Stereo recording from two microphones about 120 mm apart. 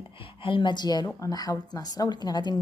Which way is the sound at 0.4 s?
45° left (ahead or behind).